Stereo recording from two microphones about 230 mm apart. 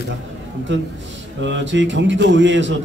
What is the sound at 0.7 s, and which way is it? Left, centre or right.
A man's voice, right.